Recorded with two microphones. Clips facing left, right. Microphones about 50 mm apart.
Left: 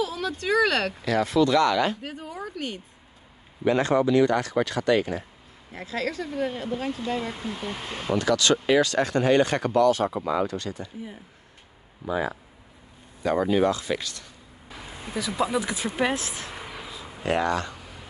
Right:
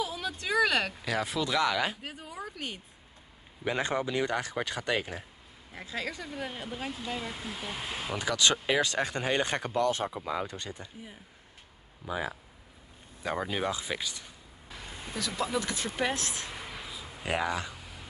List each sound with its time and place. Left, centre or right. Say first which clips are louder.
0.0 s a sound: left 6 dB; centre
0.4 s speech: left 4 dB; centre
8.2 s speech: left 6 dB; centre
8.5 s speech: left 7 dB; centre
8.8 s speech: left 8 dB; centre
9.8 s speech: left 8 dB; right
10.1 s speech: left 7 dB; centre
10.4 s speech: left 9 dB; right
12.1 s speech: left 7 dB; centre
14.7 s vehicle: left 5 dB; centre